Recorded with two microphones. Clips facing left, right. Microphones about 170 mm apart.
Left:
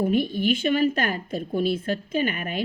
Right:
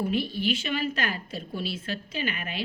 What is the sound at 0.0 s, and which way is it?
A woman's voice, 50° left (ahead or behind).